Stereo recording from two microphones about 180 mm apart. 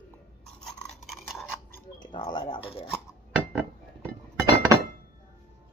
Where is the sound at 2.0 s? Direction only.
25° left (ahead or behind).